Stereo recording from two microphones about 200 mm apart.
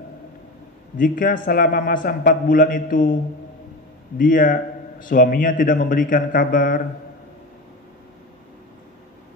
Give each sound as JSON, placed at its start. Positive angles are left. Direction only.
{"t": 0.9, "sound": "a man's voice", "side_deg": 45}
{"t": 4.2, "sound": "a man's voice", "side_deg": 45}